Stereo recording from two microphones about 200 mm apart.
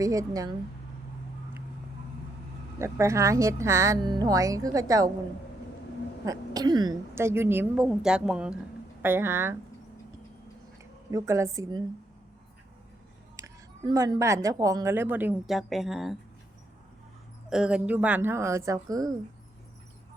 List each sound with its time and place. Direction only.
0.0 s a woman's voice: 15° right (ahead or behind)
2.7 s a woman's voice: 15° right (ahead or behind)
6.2 s a woman's voice: 20° right (ahead or behind)
11.1 s a woman's voice: 15° right (ahead or behind)
13.3 s a woman's voice: 15° right (ahead or behind); by 16.1 s centre (ahead or behind)
17.5 s a woman's voice: 5° right (ahead or behind)